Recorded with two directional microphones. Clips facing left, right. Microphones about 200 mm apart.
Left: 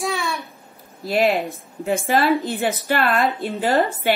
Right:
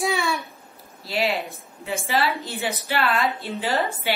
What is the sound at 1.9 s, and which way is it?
A woman's voice, 50° left (ahead or behind).